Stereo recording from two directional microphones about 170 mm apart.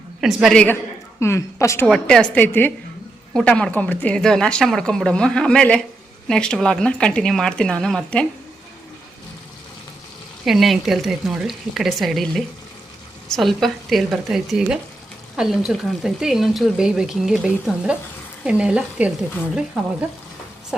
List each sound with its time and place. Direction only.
0.2 s speech: centre (ahead or behind)
1.2 s a woman's voice: 15° left (ahead or behind)
1.9 s a woman's voice: 5° left (ahead or behind)
10.4 s speech: centre (ahead or behind)